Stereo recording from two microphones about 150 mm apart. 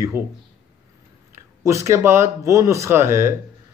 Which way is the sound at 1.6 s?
20° right (ahead or behind).